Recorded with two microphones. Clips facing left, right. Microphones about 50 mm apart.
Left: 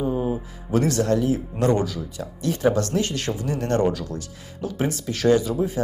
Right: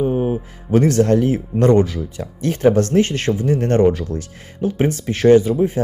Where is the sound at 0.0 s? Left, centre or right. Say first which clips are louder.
Right 5 dB; right.